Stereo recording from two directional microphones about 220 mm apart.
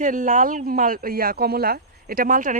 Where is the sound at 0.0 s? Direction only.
35° right (ahead or behind).